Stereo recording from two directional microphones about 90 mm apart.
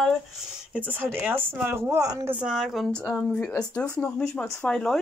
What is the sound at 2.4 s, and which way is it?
Speech, 5° right (ahead or behind).